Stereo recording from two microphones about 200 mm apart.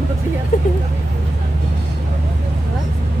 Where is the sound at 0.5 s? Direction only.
35° left (ahead or behind).